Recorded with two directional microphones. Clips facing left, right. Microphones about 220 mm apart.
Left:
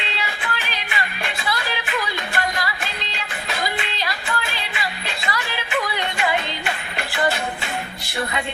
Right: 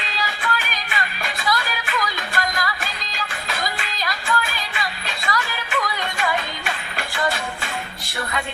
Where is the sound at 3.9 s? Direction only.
30° left (ahead or behind).